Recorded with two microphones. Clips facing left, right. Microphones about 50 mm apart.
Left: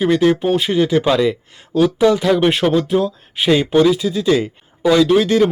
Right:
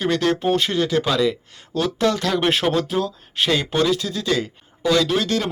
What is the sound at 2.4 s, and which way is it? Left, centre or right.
Speech, centre.